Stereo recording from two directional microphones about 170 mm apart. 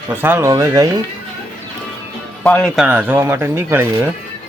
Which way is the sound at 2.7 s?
10° right (ahead or behind).